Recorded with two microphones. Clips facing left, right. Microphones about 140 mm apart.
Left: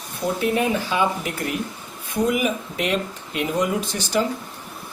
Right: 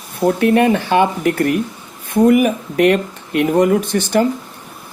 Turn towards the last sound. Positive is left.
turn(degrees=-55)  # may be behind; listen again after turning